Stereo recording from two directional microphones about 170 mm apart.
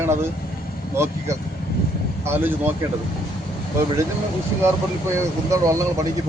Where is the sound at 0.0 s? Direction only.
15° right (ahead or behind).